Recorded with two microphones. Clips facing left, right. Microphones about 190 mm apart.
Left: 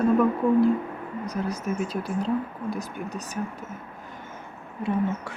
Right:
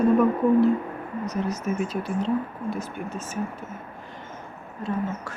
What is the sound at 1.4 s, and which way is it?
Speech, 30° left (ahead or behind).